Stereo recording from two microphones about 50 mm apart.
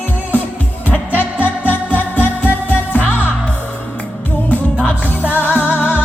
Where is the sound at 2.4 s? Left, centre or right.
Left.